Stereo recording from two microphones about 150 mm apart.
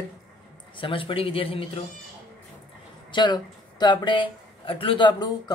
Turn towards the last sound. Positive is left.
turn(degrees=30)  # may be behind; listen again after turning